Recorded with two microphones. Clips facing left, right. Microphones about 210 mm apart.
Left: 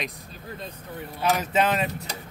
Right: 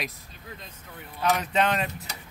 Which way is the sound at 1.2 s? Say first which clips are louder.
Left 1 dB; 5° left (ahead or behind).